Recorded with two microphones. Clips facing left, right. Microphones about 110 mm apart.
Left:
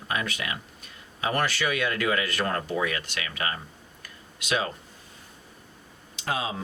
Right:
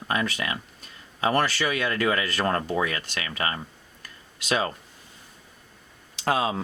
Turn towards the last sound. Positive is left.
turn(degrees=-55)  # may be behind; listen again after turning